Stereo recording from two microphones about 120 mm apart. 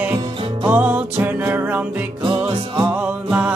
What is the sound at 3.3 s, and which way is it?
Music, 10° right (ahead or behind).